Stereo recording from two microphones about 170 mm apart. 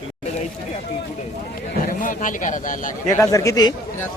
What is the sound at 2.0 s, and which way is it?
A man's voice, 50° left (ahead or behind).